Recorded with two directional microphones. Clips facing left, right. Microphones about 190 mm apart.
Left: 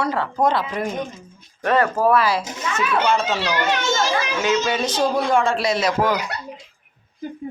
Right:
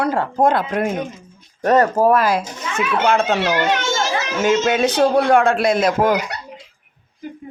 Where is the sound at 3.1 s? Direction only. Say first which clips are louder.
Right 4 dB; 60° right (ahead or behind).